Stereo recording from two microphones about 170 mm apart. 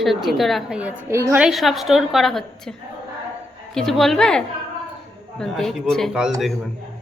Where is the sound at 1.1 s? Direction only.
15° right (ahead or behind).